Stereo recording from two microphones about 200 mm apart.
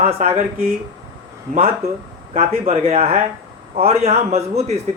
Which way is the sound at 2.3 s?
30° right (ahead or behind).